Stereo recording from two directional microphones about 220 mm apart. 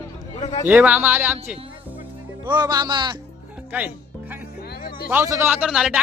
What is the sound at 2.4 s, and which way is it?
Speech, 20° right (ahead or behind).